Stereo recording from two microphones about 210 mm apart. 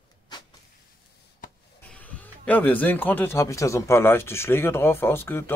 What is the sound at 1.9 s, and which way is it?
Speech, 5° left (ahead or behind).